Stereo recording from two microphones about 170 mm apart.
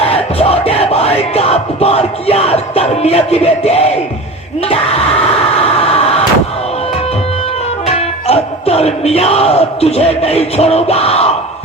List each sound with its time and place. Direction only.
0.0 s music: 35° left (ahead or behind)
4.7 s a sound: 35° left (ahead or behind)
7.9 s music: 35° left (ahead or behind)